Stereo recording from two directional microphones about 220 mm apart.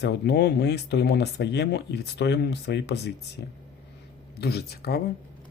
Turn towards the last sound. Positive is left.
turn(degrees=45)  # may be behind; listen again after turning